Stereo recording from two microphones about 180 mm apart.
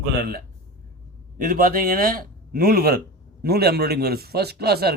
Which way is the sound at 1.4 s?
50° right (ahead or behind).